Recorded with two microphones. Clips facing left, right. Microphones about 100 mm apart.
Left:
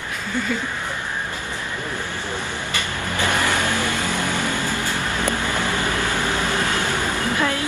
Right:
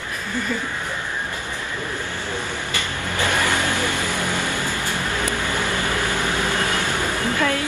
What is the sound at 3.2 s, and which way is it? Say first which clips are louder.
Vehicle: even; 15° left (ahead or behind).